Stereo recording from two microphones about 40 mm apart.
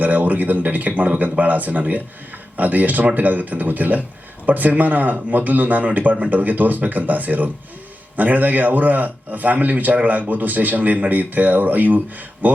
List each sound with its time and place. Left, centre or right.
0.0 s a man's voice: right